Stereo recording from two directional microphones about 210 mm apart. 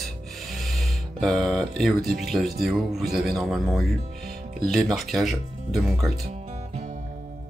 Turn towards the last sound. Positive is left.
turn(degrees=-35)  # may be behind; listen again after turning